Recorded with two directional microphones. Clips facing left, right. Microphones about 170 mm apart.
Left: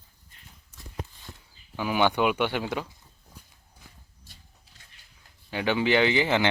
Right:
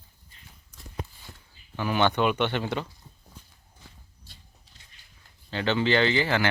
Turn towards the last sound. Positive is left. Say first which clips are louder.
# left 1 dB
turn(degrees=15)  # may be behind; listen again after turning